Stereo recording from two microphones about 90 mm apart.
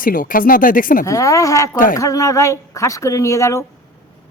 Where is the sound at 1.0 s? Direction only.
40° left (ahead or behind).